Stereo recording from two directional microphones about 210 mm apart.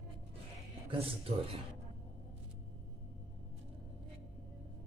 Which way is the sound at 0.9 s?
25° right (ahead or behind).